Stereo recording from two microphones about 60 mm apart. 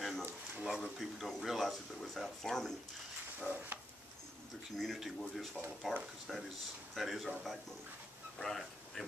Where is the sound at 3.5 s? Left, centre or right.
Right.